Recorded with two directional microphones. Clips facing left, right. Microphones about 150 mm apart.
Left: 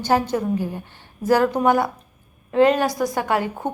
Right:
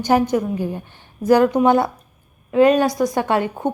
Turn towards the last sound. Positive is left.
turn(degrees=-20)  # may be behind; listen again after turning